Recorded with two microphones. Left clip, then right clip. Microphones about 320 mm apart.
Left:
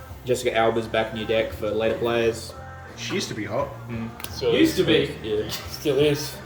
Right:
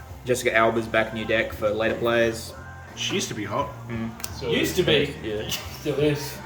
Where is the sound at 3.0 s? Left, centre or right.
Right.